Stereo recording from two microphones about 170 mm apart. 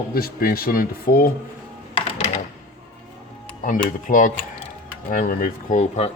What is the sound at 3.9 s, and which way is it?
Speech, 50° left (ahead or behind).